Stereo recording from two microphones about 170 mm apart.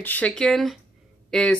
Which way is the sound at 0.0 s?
10° left (ahead or behind).